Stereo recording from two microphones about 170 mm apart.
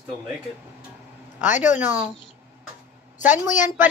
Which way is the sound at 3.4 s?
50° left (ahead or behind).